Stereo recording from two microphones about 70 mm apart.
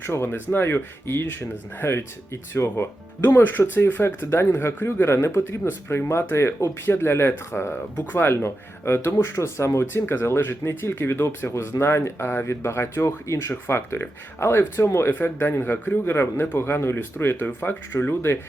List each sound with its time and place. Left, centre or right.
0.0 s speech: left
11.5 s speech: left
13.5 s speech: left